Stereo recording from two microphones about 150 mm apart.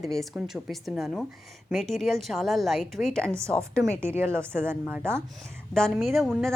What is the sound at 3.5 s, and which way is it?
Speech, 5° left (ahead or behind).